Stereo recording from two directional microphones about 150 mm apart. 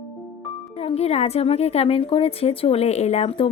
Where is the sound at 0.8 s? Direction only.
40° left (ahead or behind).